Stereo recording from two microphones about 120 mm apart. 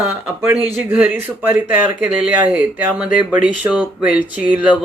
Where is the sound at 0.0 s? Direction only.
20° right (ahead or behind).